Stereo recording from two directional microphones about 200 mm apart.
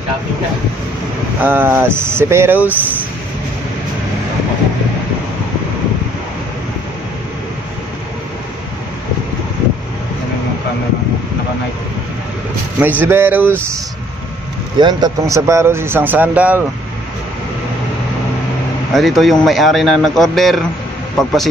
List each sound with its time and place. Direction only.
1.4 s speech: 10° right (ahead or behind)
12.7 s speech: 10° right (ahead or behind)
14.8 s speech: 20° right (ahead or behind)
18.9 s speech: centre (ahead or behind)